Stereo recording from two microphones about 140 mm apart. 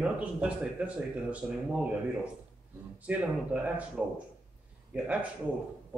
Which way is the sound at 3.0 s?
10° right (ahead or behind).